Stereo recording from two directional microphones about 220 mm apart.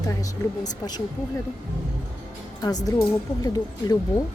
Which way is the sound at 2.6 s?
15° left (ahead or behind).